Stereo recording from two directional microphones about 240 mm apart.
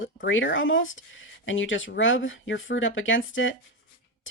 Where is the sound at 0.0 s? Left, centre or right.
Left.